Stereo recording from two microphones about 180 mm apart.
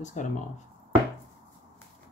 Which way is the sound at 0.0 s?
45° left (ahead or behind).